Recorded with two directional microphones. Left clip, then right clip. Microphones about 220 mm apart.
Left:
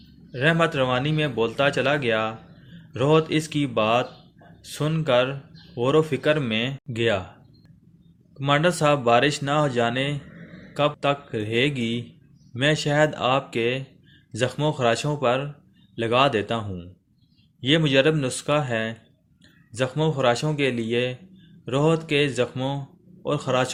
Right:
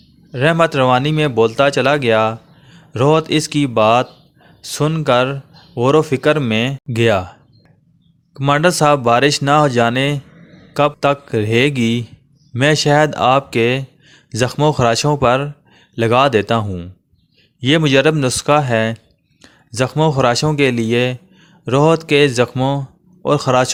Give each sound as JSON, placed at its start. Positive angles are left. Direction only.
{"t": 0.3, "sound": "speech", "side_deg": -40}
{"t": 8.3, "sound": "a man's voice", "side_deg": -40}